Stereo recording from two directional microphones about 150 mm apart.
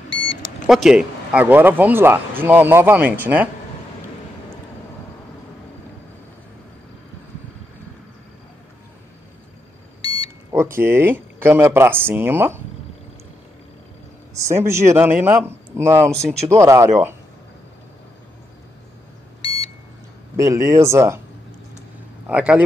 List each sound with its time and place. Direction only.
0.7 s speech: centre (ahead or behind)
10.0 s smoke detector: 40° left (ahead or behind)
10.5 s speech: 15° right (ahead or behind)
14.3 s speech: 20° right (ahead or behind)
16.1 s speech: 5° left (ahead or behind)
16.4 s speech: 20° right (ahead or behind)
19.4 s beep: 40° left (ahead or behind)
20.3 s speech: 20° right (ahead or behind)
22.3 s speech: 10° right (ahead or behind)